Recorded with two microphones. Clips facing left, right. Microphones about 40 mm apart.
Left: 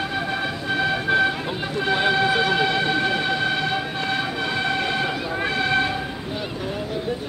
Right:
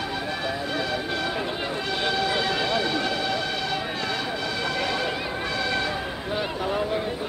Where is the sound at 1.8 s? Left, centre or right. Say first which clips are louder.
Left 7 dB; left.